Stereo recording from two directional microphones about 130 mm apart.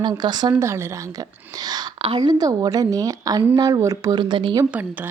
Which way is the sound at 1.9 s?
45° right (ahead or behind).